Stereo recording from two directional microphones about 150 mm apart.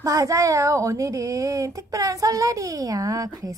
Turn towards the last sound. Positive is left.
turn(degrees=-20)  # may be behind; listen again after turning